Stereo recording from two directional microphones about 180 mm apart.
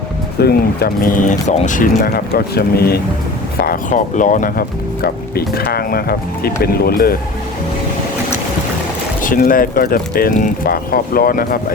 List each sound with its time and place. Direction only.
0.3 s speech: 60° left (ahead or behind)
5.0 s speech: 60° left (ahead or behind)
9.2 s speech: 50° left (ahead or behind)